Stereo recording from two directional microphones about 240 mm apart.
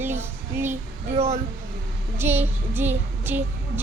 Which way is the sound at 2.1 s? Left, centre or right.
Centre.